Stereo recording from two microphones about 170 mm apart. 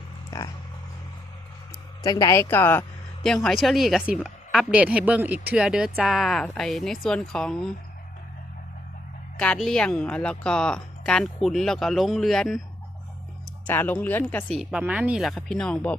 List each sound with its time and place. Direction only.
0.3 s speech: 20° left (ahead or behind)
2.0 s a woman's voice: 20° left (ahead or behind); by 7.7 s 5° left (ahead or behind)
9.4 s a woman's voice: 5° left (ahead or behind)
13.7 s speech: 10° left (ahead or behind)
14.6 s a woman's voice: 5° right (ahead or behind)